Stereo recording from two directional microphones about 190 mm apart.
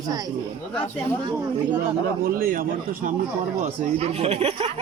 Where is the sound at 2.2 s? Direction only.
45° right (ahead or behind).